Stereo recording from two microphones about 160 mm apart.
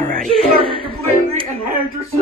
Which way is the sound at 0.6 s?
35° right (ahead or behind).